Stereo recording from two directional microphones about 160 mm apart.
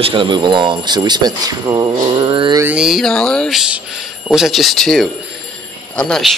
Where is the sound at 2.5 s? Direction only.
10° right (ahead or behind).